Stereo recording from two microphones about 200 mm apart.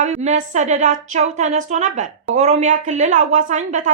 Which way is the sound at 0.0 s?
35° right (ahead or behind).